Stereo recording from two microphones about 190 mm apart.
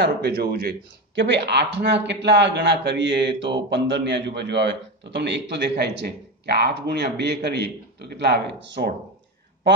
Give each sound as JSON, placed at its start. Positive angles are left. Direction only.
{"t": 0.0, "sound": "speech", "side_deg": -60}